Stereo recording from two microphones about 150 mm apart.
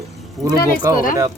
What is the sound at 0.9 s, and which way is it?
Speech, 20° right (ahead or behind).